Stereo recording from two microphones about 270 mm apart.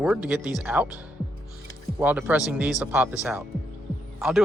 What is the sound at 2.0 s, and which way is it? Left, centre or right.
Speech, centre.